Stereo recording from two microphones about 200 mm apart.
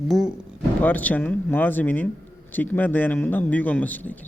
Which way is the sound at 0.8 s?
10° left (ahead or behind).